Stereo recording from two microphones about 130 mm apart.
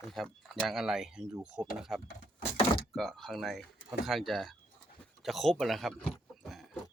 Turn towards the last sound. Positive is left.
turn(degrees=0)  # may be behind; listen again after turning